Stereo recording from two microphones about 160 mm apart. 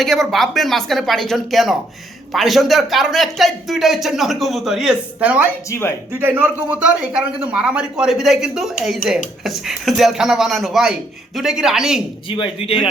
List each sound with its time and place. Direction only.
0.0 s speech: centre (ahead or behind)
5.6 s speech: 15° left (ahead or behind)
6.1 s speech: 15° right (ahead or behind)
12.4 s speech: 35° left (ahead or behind)